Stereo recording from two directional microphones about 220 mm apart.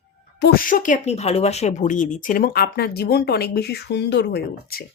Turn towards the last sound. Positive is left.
turn(degrees=45)  # may be behind; listen again after turning